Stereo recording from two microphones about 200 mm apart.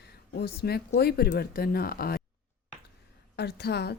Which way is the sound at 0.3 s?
55° left (ahead or behind).